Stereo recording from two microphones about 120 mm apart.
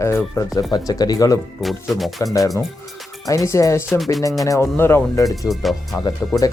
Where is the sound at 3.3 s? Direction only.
25° left (ahead or behind).